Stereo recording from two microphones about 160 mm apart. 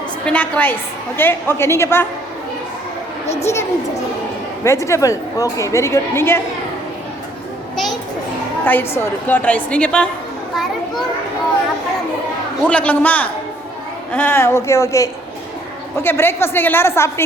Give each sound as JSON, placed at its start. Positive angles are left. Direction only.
{"t": 0.3, "sound": "a woman's voice", "side_deg": 10}
{"t": 3.4, "sound": "a woman's voice", "side_deg": 15}
{"t": 8.6, "sound": "a woman's voice", "side_deg": 15}
{"t": 12.6, "sound": "a woman's voice", "side_deg": 10}